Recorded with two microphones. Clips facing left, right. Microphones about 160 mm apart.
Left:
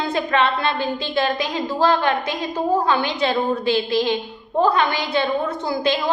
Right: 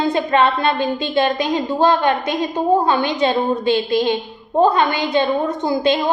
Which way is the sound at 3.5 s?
20° right (ahead or behind).